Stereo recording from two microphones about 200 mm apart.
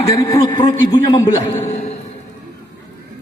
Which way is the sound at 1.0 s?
30° left (ahead or behind).